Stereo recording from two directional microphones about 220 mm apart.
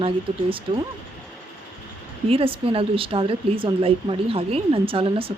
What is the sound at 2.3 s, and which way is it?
Speech, 25° right (ahead or behind).